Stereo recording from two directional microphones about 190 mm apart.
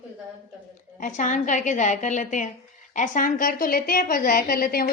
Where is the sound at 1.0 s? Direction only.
40° left (ahead or behind).